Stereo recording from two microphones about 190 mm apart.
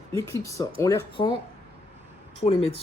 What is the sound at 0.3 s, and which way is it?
Speech, 15° left (ahead or behind).